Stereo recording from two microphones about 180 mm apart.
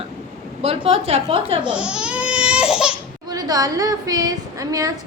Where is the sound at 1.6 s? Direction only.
5° right (ahead or behind).